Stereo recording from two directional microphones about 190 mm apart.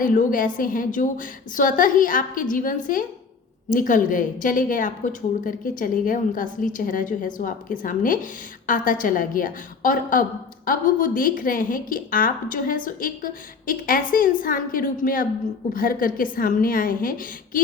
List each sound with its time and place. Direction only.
0.0 s a woman's voice: 45° left (ahead or behind)